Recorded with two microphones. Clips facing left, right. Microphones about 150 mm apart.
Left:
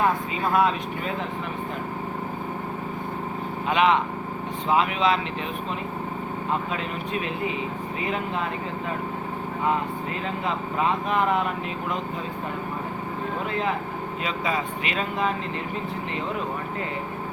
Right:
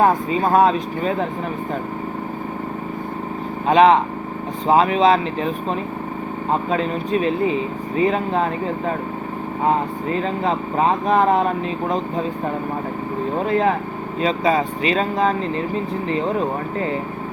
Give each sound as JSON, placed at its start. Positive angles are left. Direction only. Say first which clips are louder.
{"t": 0.0, "sound": "speech", "louder": "right 7 dB", "side_deg": -40}
{"t": 3.7, "sound": "speech", "louder": "right 8 dB", "side_deg": -35}
{"t": 6.5, "sound": "speech", "louder": "right 9 dB", "side_deg": -35}
{"t": 9.6, "sound": "speech", "louder": "right 6 dB", "side_deg": -35}
{"t": 13.4, "sound": "speech", "louder": "right 9 dB", "side_deg": -35}